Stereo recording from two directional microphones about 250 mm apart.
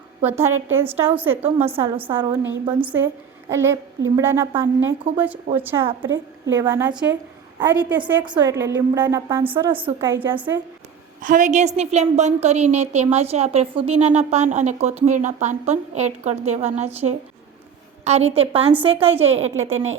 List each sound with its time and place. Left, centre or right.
0.3 s a woman's voice: centre
1.4 s a woman's voice: right
1.8 s a woman's voice: centre
11.2 s a woman's voice: right
19.7 s speech: right